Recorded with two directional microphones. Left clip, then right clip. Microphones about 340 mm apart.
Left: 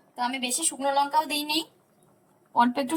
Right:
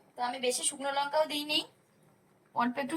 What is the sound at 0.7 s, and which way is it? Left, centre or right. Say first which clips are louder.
Music: left 9 dB; left.